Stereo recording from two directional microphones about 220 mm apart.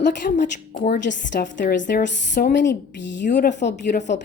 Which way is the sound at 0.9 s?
55° left (ahead or behind).